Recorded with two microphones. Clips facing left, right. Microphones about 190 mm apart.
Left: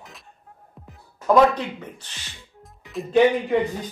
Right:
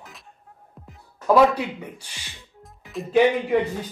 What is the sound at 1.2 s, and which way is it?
Speech, 10° right (ahead or behind).